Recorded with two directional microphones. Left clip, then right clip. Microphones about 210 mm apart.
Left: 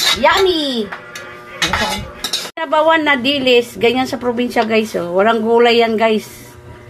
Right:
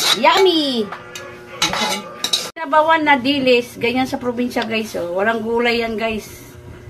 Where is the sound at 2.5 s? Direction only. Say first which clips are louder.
Left 2 dB; 25° left (ahead or behind).